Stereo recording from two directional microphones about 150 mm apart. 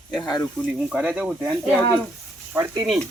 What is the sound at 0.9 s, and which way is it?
Speech, 5° right (ahead or behind).